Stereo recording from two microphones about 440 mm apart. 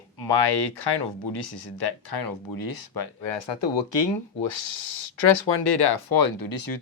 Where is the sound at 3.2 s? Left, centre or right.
Left.